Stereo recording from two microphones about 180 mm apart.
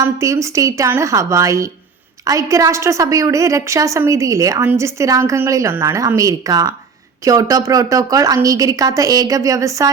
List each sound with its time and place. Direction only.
0.2 s a woman's voice: 15° right (ahead or behind)